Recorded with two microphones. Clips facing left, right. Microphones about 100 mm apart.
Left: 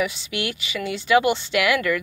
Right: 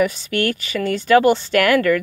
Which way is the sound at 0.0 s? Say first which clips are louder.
Right 7 dB; 45° right (ahead or behind).